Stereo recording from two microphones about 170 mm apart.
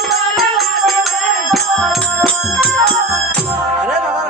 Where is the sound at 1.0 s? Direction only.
Centre (ahead or behind).